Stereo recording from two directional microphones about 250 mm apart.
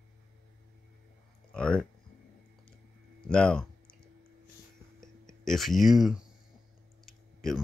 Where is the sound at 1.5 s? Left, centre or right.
Centre.